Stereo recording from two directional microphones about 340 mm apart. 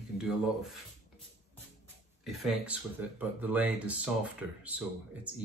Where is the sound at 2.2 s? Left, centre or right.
Centre.